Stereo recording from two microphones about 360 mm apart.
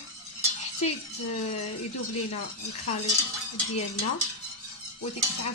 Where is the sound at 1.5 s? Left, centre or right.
Left.